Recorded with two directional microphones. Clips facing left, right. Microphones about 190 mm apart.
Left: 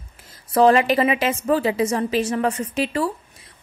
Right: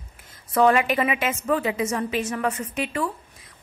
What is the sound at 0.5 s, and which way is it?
A woman's voice, 35° left (ahead or behind).